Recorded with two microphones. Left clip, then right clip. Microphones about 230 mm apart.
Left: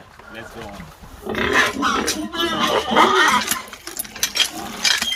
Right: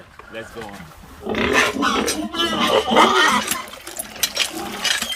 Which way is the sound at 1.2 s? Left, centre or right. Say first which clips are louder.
Even; right.